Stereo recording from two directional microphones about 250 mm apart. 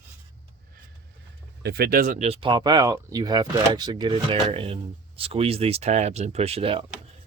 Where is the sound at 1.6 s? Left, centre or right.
Right.